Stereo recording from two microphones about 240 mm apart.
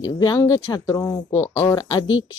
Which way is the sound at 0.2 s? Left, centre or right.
Centre.